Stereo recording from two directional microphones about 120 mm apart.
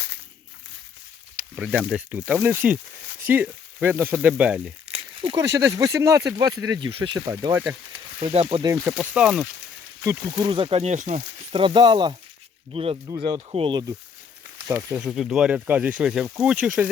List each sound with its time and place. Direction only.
1.5 s speech: 10° right (ahead or behind)
4.9 s crumpling: 50° right (ahead or behind)
5.4 s speech: 25° right (ahead or behind); by 7.2 s 40° right (ahead or behind)
7.3 s speech: 25° right (ahead or behind)
8.2 s speech: 60° right (ahead or behind)
8.8 s speech: 10° right (ahead or behind)
10.0 s speech: 25° right (ahead or behind); by 10.9 s 55° right (ahead or behind)
10.9 s speech: 85° right
11.5 s speech: 45° right (ahead or behind)
12.7 s speech: 50° right (ahead or behind)
13.1 s speech: 40° right (ahead or behind)
14.7 s speech: 25° right (ahead or behind)
14.9 s speech: 5° right (ahead or behind)